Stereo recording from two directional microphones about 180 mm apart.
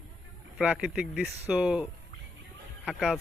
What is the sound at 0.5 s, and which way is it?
Speech, 5° right (ahead or behind).